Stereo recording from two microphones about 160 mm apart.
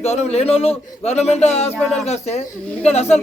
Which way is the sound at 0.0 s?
40° left (ahead or behind).